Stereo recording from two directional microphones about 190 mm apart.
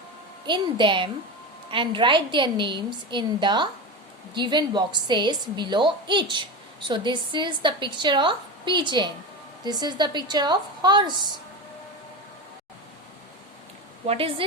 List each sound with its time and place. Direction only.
0.4 s a woman's voice: 25° right (ahead or behind)
14.1 s a woman's voice: 30° right (ahead or behind)